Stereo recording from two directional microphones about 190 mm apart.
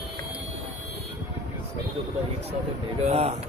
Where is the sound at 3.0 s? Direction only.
35° right (ahead or behind).